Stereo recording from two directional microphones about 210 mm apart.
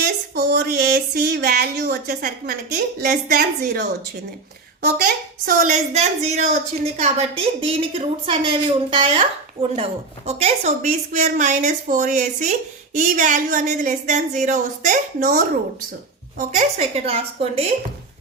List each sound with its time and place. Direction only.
0.0 s a sound: 50° right (ahead or behind)
4.8 s a woman's voice: 40° right (ahead or behind)
16.5 s a woman's voice: 35° right (ahead or behind)